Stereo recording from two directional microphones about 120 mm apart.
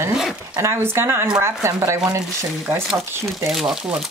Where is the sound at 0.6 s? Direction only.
20° right (ahead or behind).